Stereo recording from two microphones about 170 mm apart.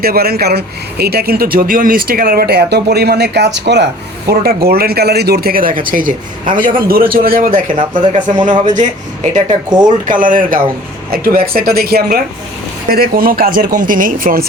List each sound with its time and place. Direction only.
0.0 s speech: 65° right (ahead or behind); by 3.8 s 90° right
4.3 s speech: 65° right (ahead or behind)
7.8 s speech: 30° right (ahead or behind)
8.6 s speech: 45° right (ahead or behind)
9.6 s speech: 25° right (ahead or behind)
10.1 s speech: 50° right (ahead or behind)